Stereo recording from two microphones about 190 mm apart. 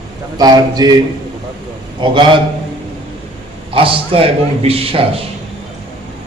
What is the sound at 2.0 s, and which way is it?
Speech, 25° right (ahead or behind).